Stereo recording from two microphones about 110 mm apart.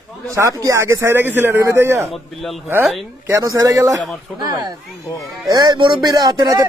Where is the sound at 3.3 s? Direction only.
25° right (ahead or behind).